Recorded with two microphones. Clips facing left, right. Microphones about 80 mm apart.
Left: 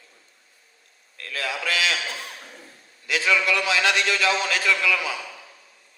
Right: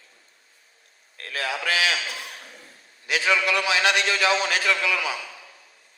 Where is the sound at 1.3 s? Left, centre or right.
Right.